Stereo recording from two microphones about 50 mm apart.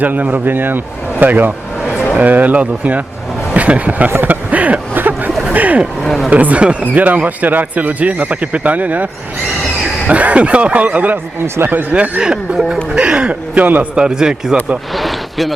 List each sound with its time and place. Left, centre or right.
0.0 s a man's voice: right
4.3 s a sound: right
5.5 s vehicle: right
6.0 s speech: centre
6.3 s speech: right
10.1 s a man's voice: right
11.4 s speech: right
11.7 s speech: right
12.2 s a man's voice: centre; by 13.8 s right
13.9 s speech: centre
14.9 s a sound: centre